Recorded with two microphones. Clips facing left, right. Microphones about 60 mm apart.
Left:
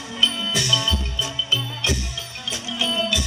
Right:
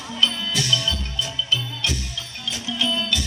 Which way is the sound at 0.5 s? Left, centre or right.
Left.